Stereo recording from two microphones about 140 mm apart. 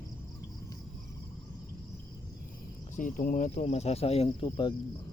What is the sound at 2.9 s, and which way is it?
Speech, 70° left (ahead or behind).